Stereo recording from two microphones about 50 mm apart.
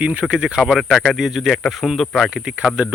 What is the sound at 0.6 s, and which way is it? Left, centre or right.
Speech, centre.